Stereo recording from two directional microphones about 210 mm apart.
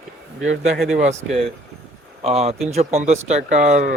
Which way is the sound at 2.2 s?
30° right (ahead or behind).